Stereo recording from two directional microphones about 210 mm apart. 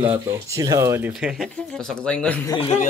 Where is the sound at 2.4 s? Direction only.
25° left (ahead or behind).